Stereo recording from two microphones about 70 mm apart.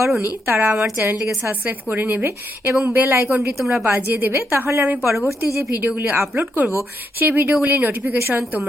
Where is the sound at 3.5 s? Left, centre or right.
Centre.